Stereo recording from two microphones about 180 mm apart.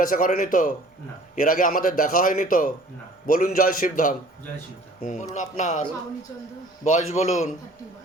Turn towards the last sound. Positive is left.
turn(degrees=40)  # may be behind; listen again after turning